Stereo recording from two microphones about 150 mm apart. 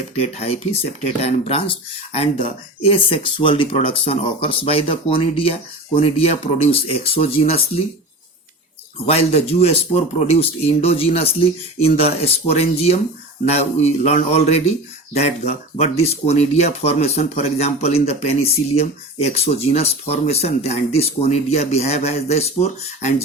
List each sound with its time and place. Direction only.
1.2 s speech: 40° left (ahead or behind)
9.1 s speech: 45° left (ahead or behind)